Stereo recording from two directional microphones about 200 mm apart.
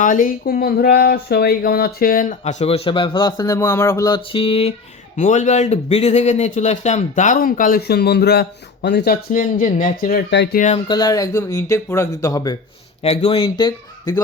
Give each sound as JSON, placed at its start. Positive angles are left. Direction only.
{"t": 0.0, "sound": "speech", "side_deg": 40}
{"t": 5.1, "sound": "speech", "side_deg": 40}
{"t": 10.8, "sound": "speech", "side_deg": 20}
{"t": 13.0, "sound": "speech", "side_deg": 30}